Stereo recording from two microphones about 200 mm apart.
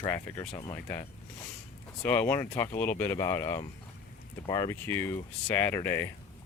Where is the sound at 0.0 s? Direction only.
15° left (ahead or behind).